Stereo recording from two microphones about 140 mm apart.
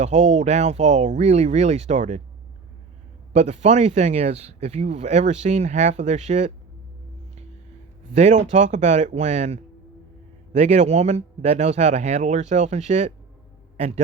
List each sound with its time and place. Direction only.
0.0 s speech: 55° right (ahead or behind)
3.3 s speech: 55° right (ahead or behind)
8.1 s a man's voice: 55° right (ahead or behind)